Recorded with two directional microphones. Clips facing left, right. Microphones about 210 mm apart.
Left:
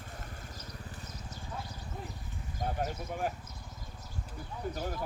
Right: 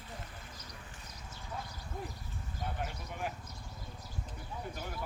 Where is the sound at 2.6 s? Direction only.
40° left (ahead or behind).